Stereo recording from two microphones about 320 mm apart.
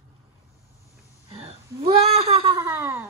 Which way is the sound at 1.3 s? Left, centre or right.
Centre.